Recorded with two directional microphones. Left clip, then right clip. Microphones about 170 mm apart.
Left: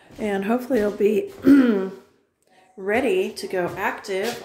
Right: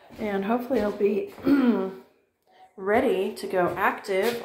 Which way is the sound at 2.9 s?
15° left (ahead or behind).